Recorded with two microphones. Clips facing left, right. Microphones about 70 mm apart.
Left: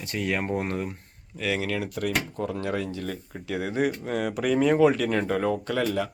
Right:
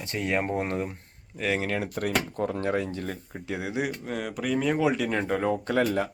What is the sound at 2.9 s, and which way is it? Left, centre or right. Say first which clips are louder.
Speech: left 1 dB; right.